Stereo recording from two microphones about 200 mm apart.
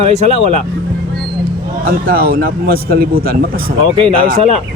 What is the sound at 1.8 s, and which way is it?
A man's voice, 50° right (ahead or behind).